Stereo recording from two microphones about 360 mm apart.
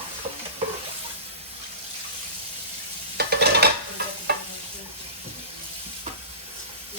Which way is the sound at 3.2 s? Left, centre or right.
Right.